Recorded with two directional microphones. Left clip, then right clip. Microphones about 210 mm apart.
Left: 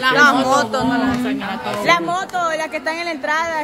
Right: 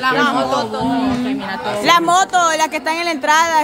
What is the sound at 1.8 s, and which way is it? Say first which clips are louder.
A woman's voice: right 5 dB; 25° right (ahead or behind).